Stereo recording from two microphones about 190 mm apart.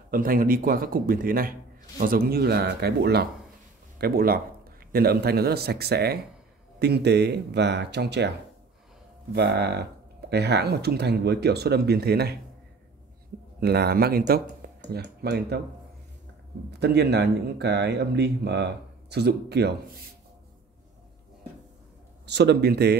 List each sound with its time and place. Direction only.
0.1 s speech: 50° right (ahead or behind)
9.3 s speech: 60° right (ahead or behind)
13.6 s speech: 55° right (ahead or behind)
16.8 s speech: 60° right (ahead or behind)
22.2 s speech: 60° right (ahead or behind)